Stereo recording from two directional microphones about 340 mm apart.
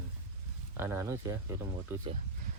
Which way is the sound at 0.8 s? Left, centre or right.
Centre.